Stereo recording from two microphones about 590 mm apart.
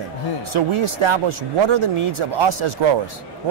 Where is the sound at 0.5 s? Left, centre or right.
Right.